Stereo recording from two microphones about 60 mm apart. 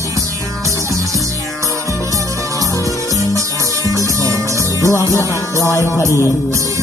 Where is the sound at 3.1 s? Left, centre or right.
Right.